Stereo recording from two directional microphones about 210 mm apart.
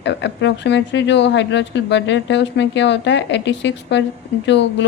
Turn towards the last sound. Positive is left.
turn(degrees=55)  # may be behind; listen again after turning